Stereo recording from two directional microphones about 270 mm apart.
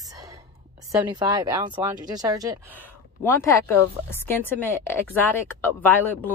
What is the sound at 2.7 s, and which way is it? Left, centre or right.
A woman's voice, centre.